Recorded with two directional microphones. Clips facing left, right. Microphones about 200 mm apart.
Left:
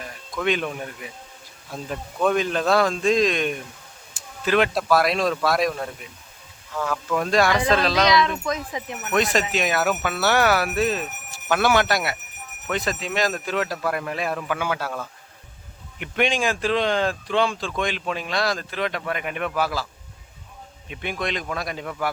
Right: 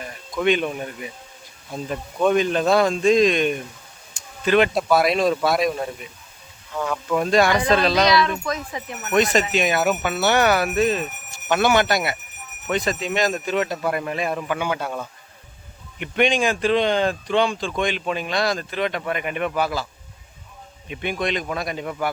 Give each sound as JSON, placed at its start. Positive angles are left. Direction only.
{"t": 0.0, "sound": "speech", "side_deg": 0}
{"t": 8.0, "sound": "speech", "side_deg": 20}
{"t": 9.0, "sound": "speech", "side_deg": 0}
{"t": 16.0, "sound": "speech", "side_deg": 0}
{"t": 20.8, "sound": "speech", "side_deg": 0}